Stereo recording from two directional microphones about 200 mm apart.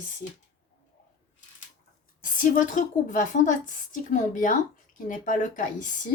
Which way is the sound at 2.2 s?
40° left (ahead or behind).